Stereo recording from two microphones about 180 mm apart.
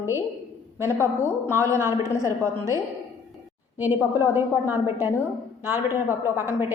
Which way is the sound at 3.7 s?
10° right (ahead or behind).